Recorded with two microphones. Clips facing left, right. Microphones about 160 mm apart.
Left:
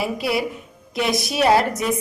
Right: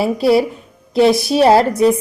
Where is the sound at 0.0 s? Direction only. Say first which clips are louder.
Right 9 dB; 30° right (ahead or behind).